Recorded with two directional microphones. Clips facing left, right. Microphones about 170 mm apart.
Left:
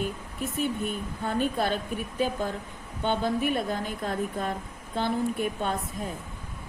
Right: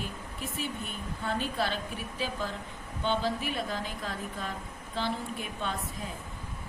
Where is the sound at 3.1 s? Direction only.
55° left (ahead or behind).